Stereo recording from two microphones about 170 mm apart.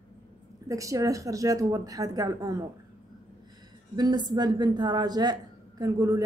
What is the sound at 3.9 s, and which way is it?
A woman's voice, 25° right (ahead or behind).